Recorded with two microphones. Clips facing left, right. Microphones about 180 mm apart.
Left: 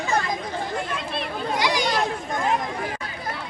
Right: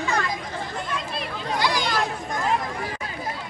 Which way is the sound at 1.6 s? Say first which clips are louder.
Left 1 dB; 20° left (ahead or behind).